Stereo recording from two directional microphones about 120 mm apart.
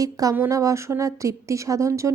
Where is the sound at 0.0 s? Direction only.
30° right (ahead or behind).